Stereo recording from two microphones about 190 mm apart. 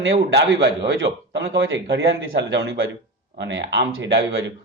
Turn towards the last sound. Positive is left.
turn(degrees=-70)  # may be behind; listen again after turning